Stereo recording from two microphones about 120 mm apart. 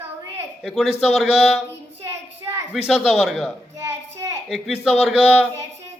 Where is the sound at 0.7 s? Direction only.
Centre (ahead or behind).